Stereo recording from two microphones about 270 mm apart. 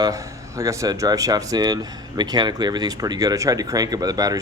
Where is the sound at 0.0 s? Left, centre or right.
Centre.